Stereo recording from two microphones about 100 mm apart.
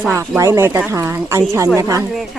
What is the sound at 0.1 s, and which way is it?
Speech, 30° right (ahead or behind).